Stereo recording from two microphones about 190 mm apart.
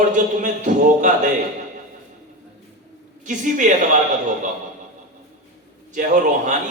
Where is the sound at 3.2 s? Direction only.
45° right (ahead or behind).